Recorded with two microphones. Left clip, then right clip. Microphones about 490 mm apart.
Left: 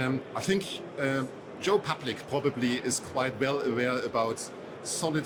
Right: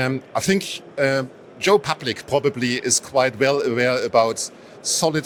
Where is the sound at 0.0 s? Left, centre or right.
Right.